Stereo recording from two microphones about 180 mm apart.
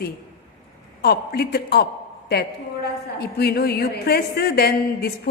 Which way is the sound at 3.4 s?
60° left (ahead or behind).